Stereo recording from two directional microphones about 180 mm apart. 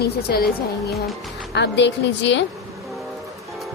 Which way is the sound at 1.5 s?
75° left (ahead or behind).